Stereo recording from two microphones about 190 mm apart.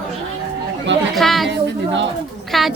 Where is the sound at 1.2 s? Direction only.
Centre (ahead or behind).